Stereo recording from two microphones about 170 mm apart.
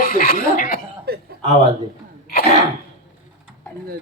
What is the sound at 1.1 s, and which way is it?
Chuckle, 65° right (ahead or behind).